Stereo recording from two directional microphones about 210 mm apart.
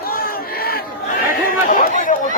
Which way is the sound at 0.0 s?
45° left (ahead or behind).